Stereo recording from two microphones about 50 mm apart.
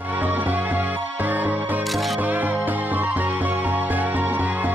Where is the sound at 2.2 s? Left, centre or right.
Right.